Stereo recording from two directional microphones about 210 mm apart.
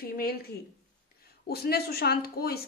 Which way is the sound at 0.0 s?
45° left (ahead or behind).